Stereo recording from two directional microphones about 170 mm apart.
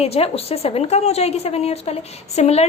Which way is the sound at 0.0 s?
35° left (ahead or behind).